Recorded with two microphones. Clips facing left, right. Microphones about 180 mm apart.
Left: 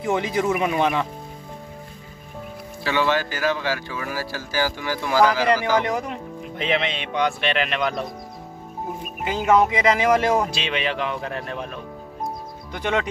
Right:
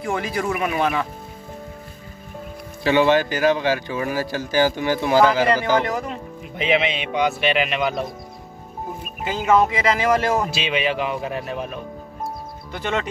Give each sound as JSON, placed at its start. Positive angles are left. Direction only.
{"t": 0.0, "sound": "speech", "side_deg": 20}
{"t": 2.8, "sound": "speech", "side_deg": -20}
{"t": 5.9, "sound": "speech", "side_deg": 15}
{"t": 6.5, "sound": "speech", "side_deg": -5}
{"t": 9.5, "sound": "speech", "side_deg": 15}
{"t": 10.3, "sound": "speech", "side_deg": -5}
{"t": 12.7, "sound": "speech", "side_deg": 15}